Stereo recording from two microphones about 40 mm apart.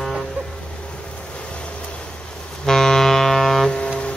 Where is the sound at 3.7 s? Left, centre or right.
Left.